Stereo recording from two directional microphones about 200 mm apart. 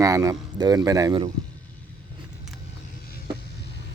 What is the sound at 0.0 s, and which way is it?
Speech, 15° right (ahead or behind).